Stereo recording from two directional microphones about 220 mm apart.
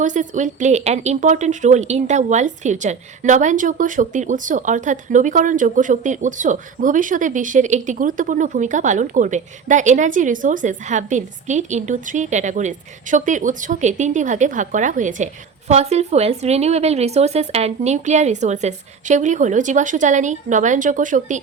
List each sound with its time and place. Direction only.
0.0 s speech: 35° right (ahead or behind)